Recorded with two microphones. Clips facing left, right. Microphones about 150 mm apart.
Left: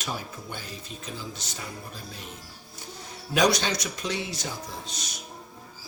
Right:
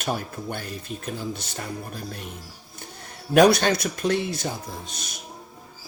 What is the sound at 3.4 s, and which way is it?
Speech, 55° right (ahead or behind).